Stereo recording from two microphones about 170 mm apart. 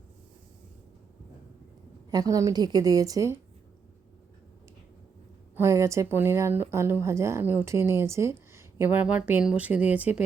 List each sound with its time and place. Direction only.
2.0 s a woman's voice: 20° right (ahead or behind)
5.5 s a woman's voice: 15° right (ahead or behind)